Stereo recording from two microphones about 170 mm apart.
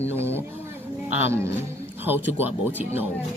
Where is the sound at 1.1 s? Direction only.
15° right (ahead or behind).